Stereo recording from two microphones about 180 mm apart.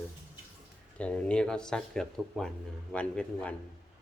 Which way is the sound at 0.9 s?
5° left (ahead or behind).